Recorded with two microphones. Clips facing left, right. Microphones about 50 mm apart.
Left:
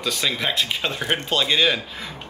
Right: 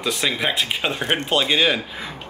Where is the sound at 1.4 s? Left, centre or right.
Centre.